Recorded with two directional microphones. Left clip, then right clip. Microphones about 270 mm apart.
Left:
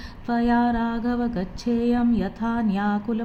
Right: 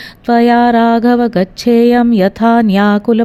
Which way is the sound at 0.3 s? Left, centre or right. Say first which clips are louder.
Right 13 dB; right.